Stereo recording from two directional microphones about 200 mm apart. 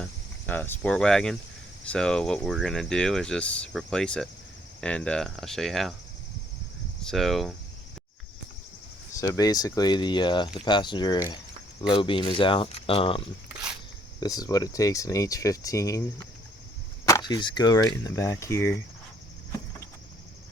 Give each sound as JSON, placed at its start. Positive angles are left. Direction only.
{"t": 0.0, "sound": "speech", "side_deg": 10}
{"t": 7.0, "sound": "speech", "side_deg": 0}
{"t": 9.1, "sound": "speech", "side_deg": 15}
{"t": 17.1, "sound": "speech", "side_deg": 20}